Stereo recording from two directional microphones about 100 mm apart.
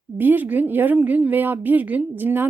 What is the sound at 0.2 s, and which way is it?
A woman's voice, 20° right (ahead or behind).